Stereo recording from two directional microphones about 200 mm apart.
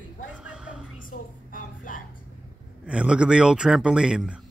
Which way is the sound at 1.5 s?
40° left (ahead or behind).